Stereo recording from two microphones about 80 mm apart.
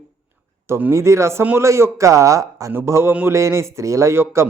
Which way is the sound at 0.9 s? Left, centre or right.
Right.